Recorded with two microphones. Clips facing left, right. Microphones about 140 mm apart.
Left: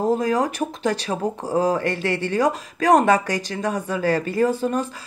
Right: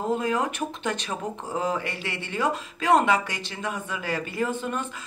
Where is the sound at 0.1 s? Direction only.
35° left (ahead or behind).